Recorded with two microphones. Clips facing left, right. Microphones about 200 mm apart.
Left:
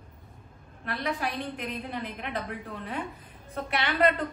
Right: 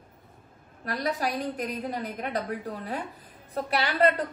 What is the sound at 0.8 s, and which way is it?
A woman's voice, 40° right (ahead or behind).